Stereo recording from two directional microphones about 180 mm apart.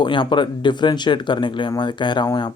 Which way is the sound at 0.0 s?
25° left (ahead or behind).